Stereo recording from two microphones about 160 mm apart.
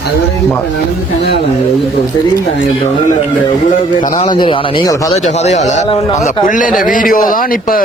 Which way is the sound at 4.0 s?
55° left (ahead or behind).